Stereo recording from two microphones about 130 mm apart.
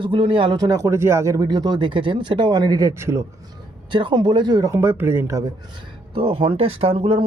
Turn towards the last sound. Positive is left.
turn(degrees=-45)  # may be behind; listen again after turning